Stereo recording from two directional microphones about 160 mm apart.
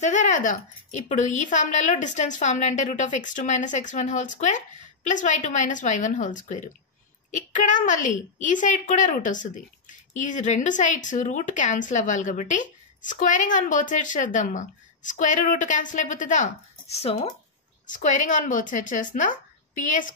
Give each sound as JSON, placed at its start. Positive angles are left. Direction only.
{"t": 0.0, "sound": "a woman's voice", "side_deg": 50}
{"t": 17.9, "sound": "a woman's voice", "side_deg": 50}